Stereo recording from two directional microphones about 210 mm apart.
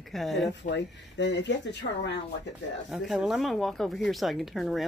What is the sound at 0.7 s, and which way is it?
Speech, 60° left (ahead or behind).